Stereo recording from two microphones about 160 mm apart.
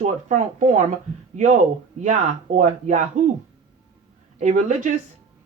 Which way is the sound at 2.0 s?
50° right (ahead or behind).